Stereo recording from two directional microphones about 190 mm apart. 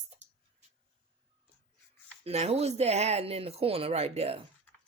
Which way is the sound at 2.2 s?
35° right (ahead or behind).